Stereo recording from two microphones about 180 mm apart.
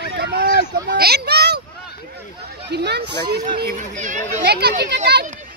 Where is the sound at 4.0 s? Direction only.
45° right (ahead or behind).